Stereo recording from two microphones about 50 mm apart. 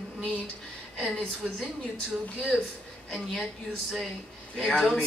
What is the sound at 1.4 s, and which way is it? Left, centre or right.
A woman's voice, centre.